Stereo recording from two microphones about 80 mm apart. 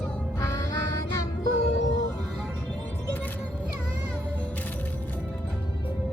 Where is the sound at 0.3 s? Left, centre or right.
Left.